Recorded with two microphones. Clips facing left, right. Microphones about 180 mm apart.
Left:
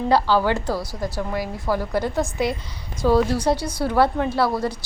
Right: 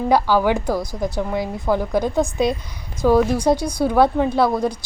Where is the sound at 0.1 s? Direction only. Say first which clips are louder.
Right 2 dB; 15° right (ahead or behind).